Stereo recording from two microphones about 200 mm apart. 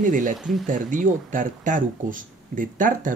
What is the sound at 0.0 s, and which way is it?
Speech, 40° right (ahead or behind).